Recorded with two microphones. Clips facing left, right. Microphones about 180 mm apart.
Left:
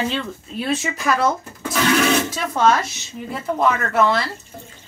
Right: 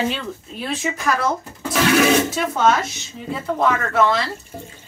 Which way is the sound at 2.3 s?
Centre (ahead or behind).